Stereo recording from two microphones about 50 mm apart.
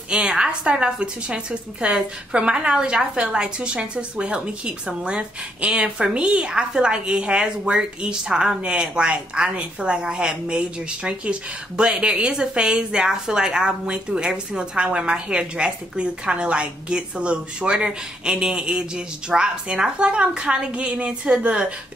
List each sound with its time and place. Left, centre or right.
0.3 s a woman's voice: centre